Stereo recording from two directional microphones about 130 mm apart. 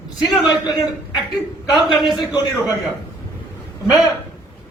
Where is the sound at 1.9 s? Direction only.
Centre (ahead or behind).